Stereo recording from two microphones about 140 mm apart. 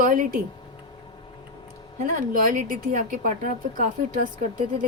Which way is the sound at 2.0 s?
75° right (ahead or behind).